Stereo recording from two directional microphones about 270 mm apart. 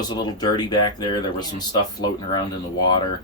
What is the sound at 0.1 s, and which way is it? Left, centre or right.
Speech, centre.